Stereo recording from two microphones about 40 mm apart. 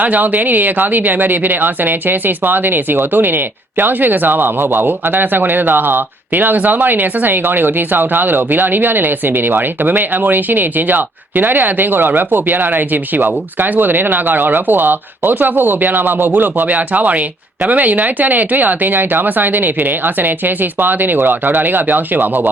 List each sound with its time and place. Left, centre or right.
0.0 s speech: right